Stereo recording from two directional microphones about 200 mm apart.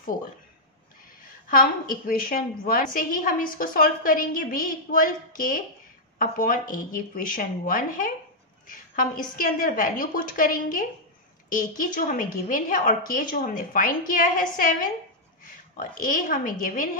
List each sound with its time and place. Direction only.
1.5 s a woman's voice: 45° left (ahead or behind)